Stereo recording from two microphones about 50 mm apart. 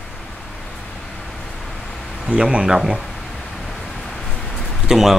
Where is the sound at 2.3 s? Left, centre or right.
Right.